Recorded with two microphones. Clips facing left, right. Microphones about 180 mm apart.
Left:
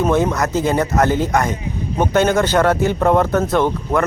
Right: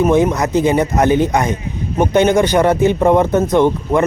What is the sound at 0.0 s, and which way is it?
Speech, 15° right (ahead or behind).